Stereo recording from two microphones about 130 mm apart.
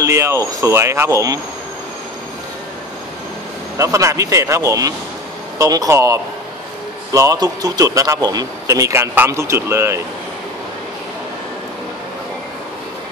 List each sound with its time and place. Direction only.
0.0 s a man's voice: 20° right (ahead or behind)
3.7 s a man's voice: 25° right (ahead or behind)